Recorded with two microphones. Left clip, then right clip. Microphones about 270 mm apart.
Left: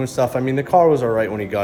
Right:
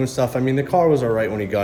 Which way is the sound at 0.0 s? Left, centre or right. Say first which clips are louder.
Left 1 dB; centre.